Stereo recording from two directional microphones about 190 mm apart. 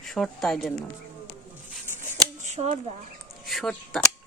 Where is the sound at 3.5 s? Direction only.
Centre (ahead or behind).